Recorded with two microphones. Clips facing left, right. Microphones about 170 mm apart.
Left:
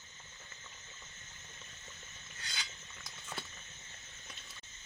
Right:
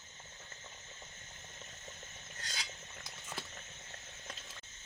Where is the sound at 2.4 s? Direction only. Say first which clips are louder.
Right 1 dB; 40° right (ahead or behind).